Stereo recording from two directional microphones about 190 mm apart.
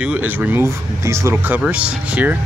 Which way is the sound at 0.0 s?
10° right (ahead or behind).